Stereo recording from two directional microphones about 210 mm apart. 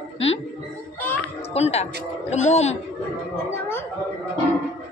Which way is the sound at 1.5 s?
30° left (ahead or behind).